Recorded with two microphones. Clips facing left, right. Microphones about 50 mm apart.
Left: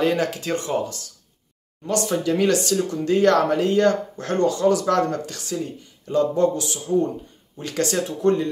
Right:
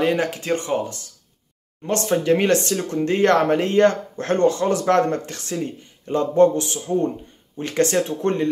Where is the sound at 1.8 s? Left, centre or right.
Right.